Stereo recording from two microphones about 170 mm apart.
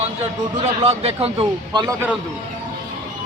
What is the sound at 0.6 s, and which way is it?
A man's voice, 40° right (ahead or behind).